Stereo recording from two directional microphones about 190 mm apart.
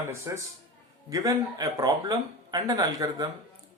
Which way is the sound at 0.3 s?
15° right (ahead or behind).